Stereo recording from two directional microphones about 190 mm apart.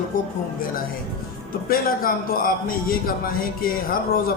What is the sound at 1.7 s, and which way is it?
A man's voice, 50° left (ahead or behind).